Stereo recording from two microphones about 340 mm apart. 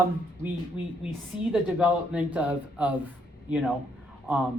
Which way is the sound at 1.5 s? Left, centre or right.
Centre.